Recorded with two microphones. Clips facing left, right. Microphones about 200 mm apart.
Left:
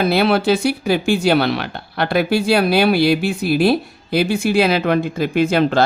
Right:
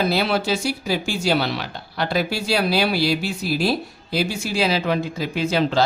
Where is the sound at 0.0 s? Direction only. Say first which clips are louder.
Left 5 dB; 60° left (ahead or behind).